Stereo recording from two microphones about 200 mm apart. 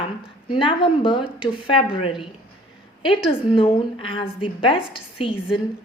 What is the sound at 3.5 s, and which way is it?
A woman's voice, 25° left (ahead or behind).